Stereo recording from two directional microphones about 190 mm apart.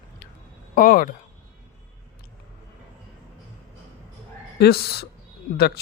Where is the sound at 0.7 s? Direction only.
45° left (ahead or behind).